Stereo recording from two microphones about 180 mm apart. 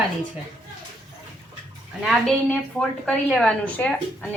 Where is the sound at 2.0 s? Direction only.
5° left (ahead or behind).